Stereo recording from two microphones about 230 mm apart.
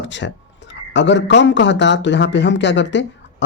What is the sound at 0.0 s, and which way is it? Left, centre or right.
A man's voice, left.